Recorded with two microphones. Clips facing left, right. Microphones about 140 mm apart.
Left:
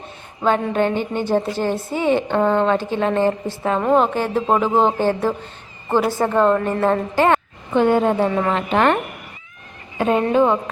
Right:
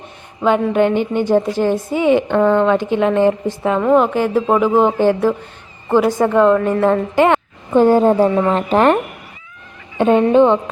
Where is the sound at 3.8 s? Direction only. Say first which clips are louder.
Right 3 dB; 20° left (ahead or behind).